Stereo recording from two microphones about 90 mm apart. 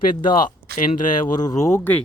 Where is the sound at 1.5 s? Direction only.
40° left (ahead or behind).